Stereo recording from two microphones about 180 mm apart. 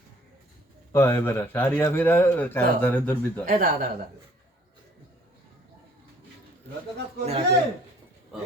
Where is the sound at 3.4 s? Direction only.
50° right (ahead or behind).